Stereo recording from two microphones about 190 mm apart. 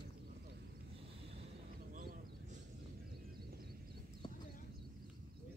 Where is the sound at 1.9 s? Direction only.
45° right (ahead or behind).